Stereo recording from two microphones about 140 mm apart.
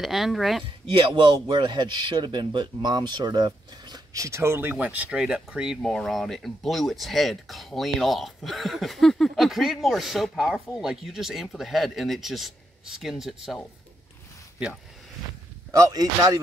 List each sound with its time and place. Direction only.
0.0 s speech: centre (ahead or behind)
0.9 s speech: 35° right (ahead or behind); by 13.6 s centre (ahead or behind)
15.9 s speech: 30° right (ahead or behind)